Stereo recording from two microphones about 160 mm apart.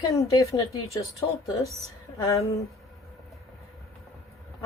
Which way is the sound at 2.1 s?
25° left (ahead or behind).